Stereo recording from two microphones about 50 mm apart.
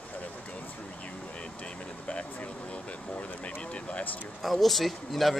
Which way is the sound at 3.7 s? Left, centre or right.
Left.